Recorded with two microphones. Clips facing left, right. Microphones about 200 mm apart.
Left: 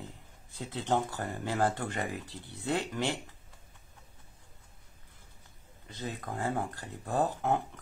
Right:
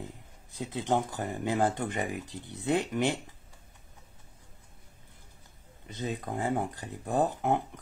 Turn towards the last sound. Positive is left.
turn(degrees=-20)  # may be behind; listen again after turning